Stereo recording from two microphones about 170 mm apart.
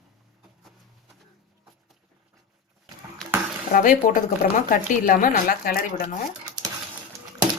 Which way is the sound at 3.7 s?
50° left (ahead or behind).